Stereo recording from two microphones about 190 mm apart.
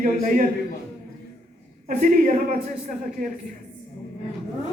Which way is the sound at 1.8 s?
45° right (ahead or behind).